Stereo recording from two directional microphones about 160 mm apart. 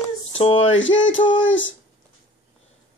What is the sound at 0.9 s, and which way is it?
Music, 30° left (ahead or behind).